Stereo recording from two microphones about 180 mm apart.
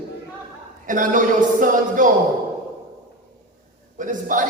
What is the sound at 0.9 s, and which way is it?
Speech, 45° right (ahead or behind).